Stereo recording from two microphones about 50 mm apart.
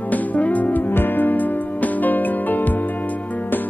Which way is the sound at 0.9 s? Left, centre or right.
Left.